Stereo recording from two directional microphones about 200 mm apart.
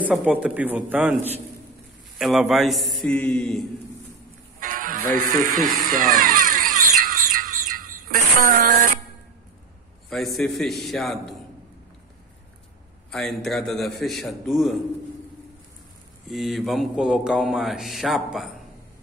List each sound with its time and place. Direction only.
0.0 s a man's voice: 5° right (ahead or behind)
4.6 s music: 45° right (ahead or behind)
5.2 s speech: 45° right (ahead or behind)
6.0 s a sound: 40° right (ahead or behind)
8.4 s speech: 45° right (ahead or behind)
10.0 s a man's voice: centre (ahead or behind)
13.1 s a man's voice: centre (ahead or behind)
16.3 s a man's voice: centre (ahead or behind)